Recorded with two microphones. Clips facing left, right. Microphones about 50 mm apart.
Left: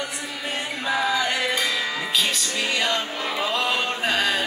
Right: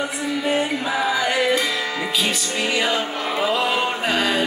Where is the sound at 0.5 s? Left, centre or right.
Centre.